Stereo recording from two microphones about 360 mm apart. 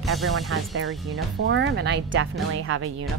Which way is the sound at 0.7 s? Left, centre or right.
Right.